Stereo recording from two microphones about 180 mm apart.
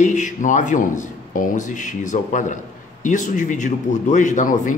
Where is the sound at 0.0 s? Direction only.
40° left (ahead or behind).